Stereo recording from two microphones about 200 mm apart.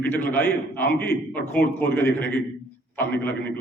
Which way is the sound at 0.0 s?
10° left (ahead or behind).